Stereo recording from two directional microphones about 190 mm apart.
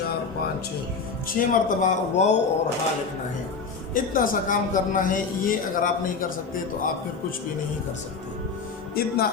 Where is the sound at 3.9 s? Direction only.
45° left (ahead or behind).